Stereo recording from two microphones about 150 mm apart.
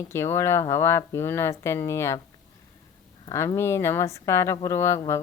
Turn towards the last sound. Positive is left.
turn(degrees=20)  # may be behind; listen again after turning